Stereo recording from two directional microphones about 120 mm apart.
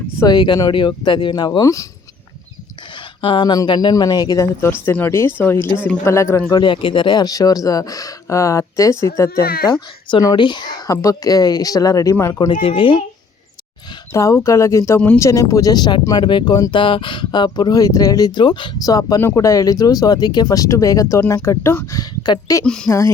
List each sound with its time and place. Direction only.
0.2 s speech: 35° left (ahead or behind)
3.2 s speech: 45° left (ahead or behind)
4.6 s speech: 20° left (ahead or behind)
6.5 s speech: 40° left (ahead or behind); by 9.7 s 25° left (ahead or behind)
10.1 s speech: 35° left (ahead or behind)
10.8 s speech: 25° left (ahead or behind)
12.6 s speech: 45° left (ahead or behind)
14.1 s speech: 25° left (ahead or behind)
15.2 s speech: 25° left (ahead or behind)
22.6 s speech: 5° left (ahead or behind)
22.9 s speech: 25° left (ahead or behind)